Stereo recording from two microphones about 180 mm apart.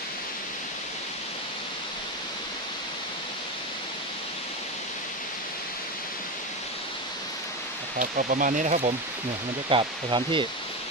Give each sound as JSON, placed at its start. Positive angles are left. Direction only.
{"t": 7.9, "sound": "speech", "side_deg": -50}
{"t": 9.6, "sound": "speech", "side_deg": -30}